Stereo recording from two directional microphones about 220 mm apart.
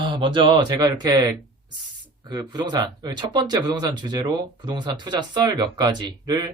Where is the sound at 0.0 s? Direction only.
20° right (ahead or behind).